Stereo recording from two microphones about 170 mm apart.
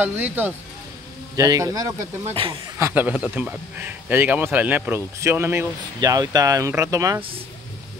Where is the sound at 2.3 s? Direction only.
30° right (ahead or behind).